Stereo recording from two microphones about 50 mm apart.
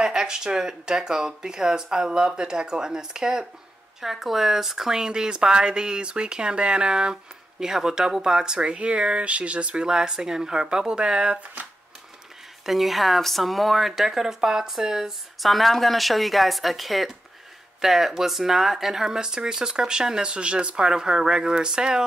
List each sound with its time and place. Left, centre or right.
0.0 s speech: centre
11.6 s speech: right
12.6 s speech: centre